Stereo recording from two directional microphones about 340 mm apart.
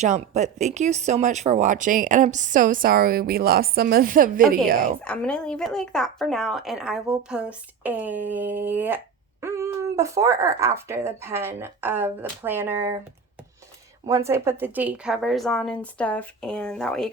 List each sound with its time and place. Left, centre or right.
0.0 s speech: centre
5.0 s speech: centre
14.1 s speech: centre